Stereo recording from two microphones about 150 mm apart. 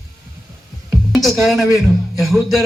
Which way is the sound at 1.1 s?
Centre (ahead or behind).